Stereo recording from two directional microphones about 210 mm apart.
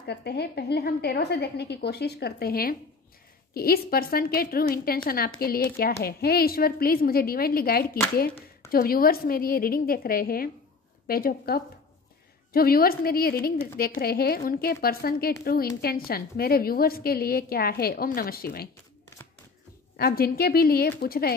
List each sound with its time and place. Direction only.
0.0 s a woman's voice: 50° left (ahead or behind)
20.0 s a woman's voice: 45° left (ahead or behind)